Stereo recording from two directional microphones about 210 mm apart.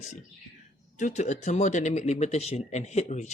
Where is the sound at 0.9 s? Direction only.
35° left (ahead or behind).